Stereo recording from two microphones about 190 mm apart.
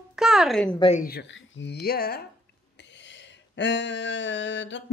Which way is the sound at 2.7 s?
70° left (ahead or behind).